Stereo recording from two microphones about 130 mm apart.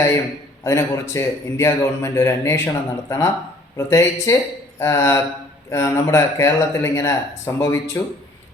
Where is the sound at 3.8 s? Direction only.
20° left (ahead or behind).